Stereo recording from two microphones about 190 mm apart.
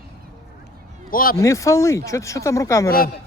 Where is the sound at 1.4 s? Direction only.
15° left (ahead or behind).